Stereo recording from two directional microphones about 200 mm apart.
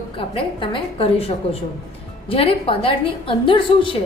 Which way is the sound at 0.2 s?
25° left (ahead or behind).